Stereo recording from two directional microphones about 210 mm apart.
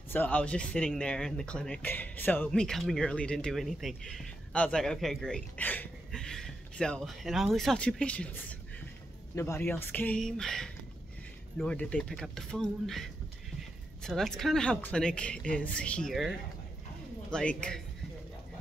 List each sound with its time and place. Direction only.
0.1 s speech: 10° left (ahead or behind)